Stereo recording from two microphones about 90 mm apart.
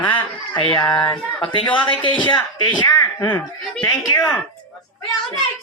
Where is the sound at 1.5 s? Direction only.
65° left (ahead or behind).